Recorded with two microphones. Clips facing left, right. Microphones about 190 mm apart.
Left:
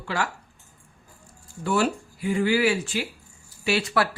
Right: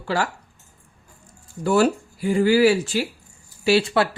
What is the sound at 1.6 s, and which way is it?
Speech, 40° right (ahead or behind).